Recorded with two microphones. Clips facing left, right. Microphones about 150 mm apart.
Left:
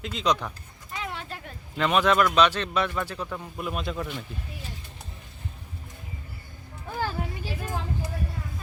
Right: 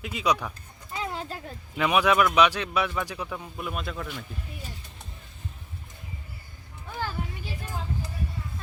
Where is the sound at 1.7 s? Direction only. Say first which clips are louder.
Even; 10° right (ahead or behind).